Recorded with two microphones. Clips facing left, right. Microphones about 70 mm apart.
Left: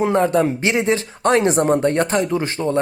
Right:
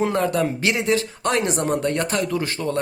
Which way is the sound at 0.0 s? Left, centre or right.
Left.